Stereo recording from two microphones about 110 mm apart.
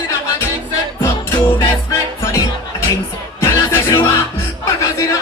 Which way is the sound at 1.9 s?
25° left (ahead or behind).